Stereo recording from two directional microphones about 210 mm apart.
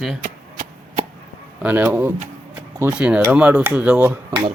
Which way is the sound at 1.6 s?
5° right (ahead or behind).